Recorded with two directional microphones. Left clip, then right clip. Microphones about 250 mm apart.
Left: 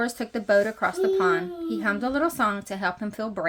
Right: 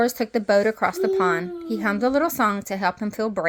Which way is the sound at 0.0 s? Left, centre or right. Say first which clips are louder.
Right 6 dB; right.